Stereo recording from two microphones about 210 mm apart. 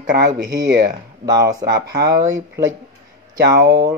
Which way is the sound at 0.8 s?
20° right (ahead or behind).